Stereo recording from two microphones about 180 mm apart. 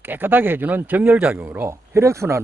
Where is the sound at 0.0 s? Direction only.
10° right (ahead or behind).